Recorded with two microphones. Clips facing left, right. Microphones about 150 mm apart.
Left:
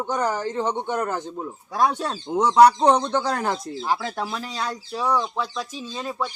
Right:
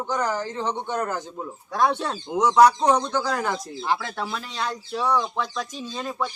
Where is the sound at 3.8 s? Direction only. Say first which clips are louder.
Left 1 dB; 10° left (ahead or behind).